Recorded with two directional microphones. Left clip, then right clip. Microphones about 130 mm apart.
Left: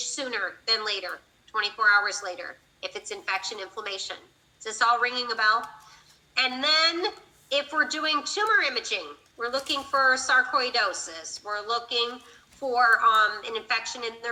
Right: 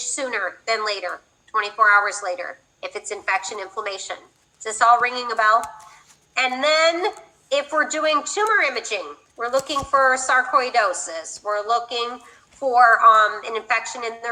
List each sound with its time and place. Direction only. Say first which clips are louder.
0.0 s a woman's voice: right 5 dB; 50° right (ahead or behind)